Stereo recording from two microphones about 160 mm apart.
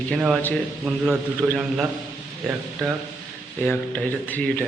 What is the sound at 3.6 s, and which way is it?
Speech, 10° left (ahead or behind).